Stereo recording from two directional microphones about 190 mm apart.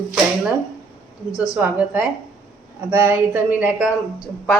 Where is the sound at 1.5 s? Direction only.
10° right (ahead or behind).